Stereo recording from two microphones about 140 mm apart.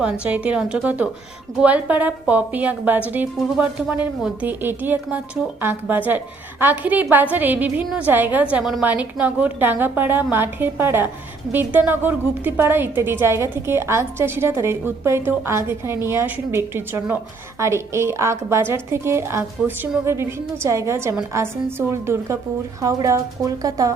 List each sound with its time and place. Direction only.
0.0 s a woman's voice: 10° right (ahead or behind)